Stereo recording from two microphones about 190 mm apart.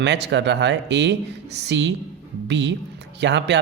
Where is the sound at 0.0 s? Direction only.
65° right (ahead or behind).